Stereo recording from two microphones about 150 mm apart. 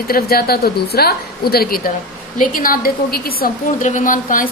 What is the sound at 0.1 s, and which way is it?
A woman's voice, 90° left.